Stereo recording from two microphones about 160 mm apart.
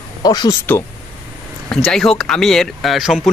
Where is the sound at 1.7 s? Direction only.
5° left (ahead or behind).